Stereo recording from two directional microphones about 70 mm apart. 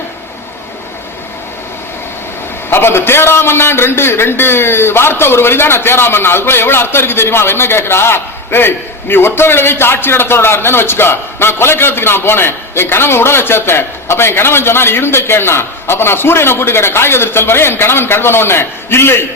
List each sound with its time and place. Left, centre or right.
2.6 s a man's voice: left